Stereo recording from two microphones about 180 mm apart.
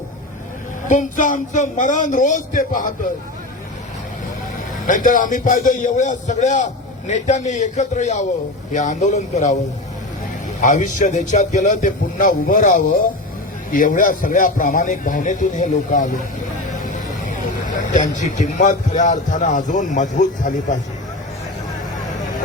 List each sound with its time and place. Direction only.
0.9 s a man's voice: 45° left (ahead or behind)
4.9 s a man's voice: 45° left (ahead or behind)
10.6 s a man's voice: 45° left (ahead or behind)
18.0 s a man's voice: 45° left (ahead or behind)